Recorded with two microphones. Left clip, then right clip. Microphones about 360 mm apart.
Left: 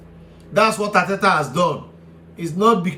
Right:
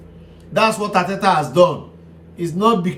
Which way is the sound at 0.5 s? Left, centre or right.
Centre.